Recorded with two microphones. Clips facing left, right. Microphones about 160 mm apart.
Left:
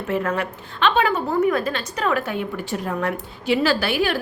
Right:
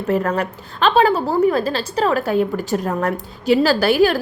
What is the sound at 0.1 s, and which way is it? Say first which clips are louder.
A woman's voice: right 4 dB; 40° right (ahead or behind).